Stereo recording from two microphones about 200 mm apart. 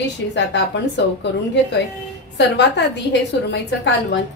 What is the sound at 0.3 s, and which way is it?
Speech, 60° left (ahead or behind).